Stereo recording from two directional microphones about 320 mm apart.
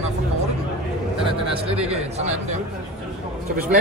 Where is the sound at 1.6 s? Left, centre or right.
Centre.